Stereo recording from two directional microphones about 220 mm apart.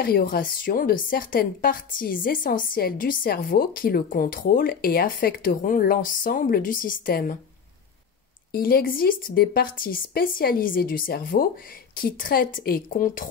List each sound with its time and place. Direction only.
0.0 s a woman's voice: 45° left (ahead or behind)
8.5 s a woman's voice: 45° left (ahead or behind)